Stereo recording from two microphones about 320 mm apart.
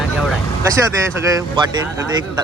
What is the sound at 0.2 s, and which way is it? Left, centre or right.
Speech, centre.